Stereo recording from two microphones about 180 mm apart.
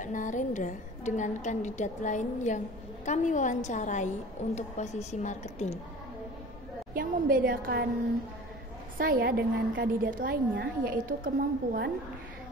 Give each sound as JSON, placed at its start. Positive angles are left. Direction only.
{"t": 0.0, "sound": "a woman's voice", "side_deg": 45}
{"t": 6.9, "sound": "a woman's voice", "side_deg": -50}
{"t": 8.9, "sound": "a woman's voice", "side_deg": -55}